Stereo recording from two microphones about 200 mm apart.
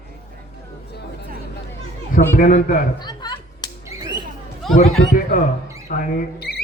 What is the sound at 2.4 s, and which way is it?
Speech, 40° left (ahead or behind).